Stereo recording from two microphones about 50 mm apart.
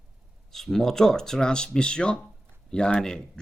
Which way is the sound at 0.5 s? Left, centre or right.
Centre.